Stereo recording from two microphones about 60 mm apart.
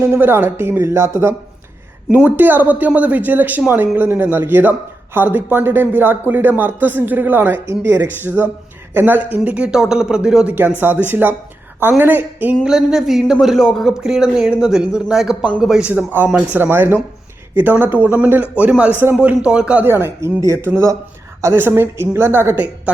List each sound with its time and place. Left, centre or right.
0.0 s speech: right
2.1 s speech: right
9.7 s speech: centre
10.4 s speech: right
12.6 s speech: centre
13.6 s speech: centre
14.0 s speech: centre
15.8 s speech: right
19.8 s speech: right